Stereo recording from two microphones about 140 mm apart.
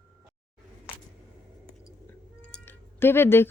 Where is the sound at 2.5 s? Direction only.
15° left (ahead or behind).